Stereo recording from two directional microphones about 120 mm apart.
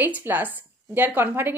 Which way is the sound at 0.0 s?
15° right (ahead or behind).